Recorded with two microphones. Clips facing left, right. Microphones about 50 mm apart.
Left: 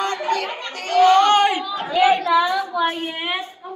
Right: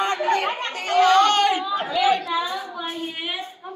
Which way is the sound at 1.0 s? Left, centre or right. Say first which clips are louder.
Left 3 dB; left.